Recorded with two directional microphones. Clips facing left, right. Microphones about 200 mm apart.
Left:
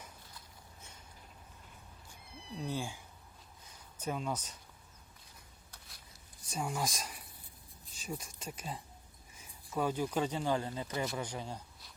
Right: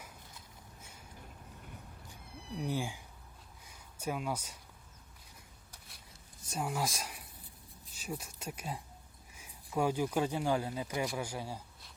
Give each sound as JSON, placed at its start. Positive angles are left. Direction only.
{"t": 2.6, "sound": "speech", "side_deg": -15}
{"t": 6.5, "sound": "speech", "side_deg": -5}